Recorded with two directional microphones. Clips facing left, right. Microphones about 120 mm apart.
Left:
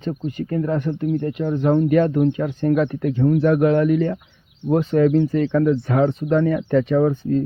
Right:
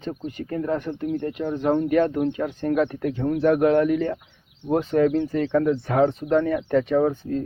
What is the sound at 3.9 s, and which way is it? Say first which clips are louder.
Speech: left 4 dB; 45° right (ahead or behind).